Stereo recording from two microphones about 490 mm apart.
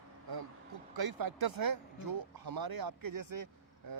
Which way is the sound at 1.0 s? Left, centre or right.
Right.